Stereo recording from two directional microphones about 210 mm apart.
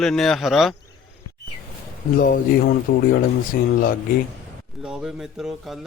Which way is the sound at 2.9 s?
45° left (ahead or behind).